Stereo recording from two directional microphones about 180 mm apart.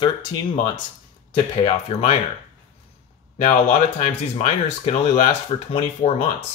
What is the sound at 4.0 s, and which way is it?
Speech, 35° left (ahead or behind).